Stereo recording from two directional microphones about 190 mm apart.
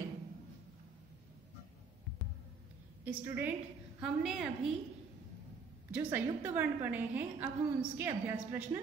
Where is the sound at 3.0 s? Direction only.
10° right (ahead or behind).